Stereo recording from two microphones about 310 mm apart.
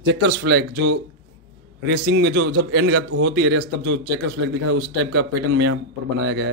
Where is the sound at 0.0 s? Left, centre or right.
Right.